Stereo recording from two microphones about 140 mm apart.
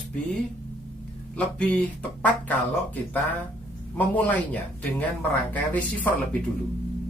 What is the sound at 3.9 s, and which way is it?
Music, 10° left (ahead or behind).